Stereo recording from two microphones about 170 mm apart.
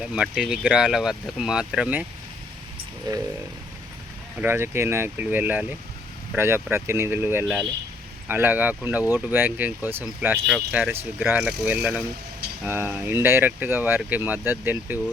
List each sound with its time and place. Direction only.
0.0 s speech: 5° right (ahead or behind)
3.1 s a sound: 25° right (ahead or behind)
4.4 s speech: 15° right (ahead or behind)